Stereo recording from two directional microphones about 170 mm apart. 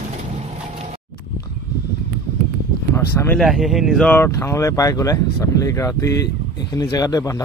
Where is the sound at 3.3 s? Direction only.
Centre (ahead or behind).